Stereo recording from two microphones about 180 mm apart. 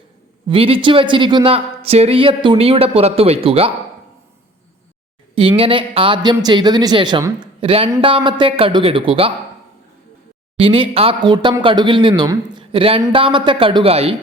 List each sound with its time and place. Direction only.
0.4 s speech: 30° right (ahead or behind)
5.3 s speech: 30° right (ahead or behind)
7.6 s speech: 30° right (ahead or behind)
10.6 s speech: 30° right (ahead or behind)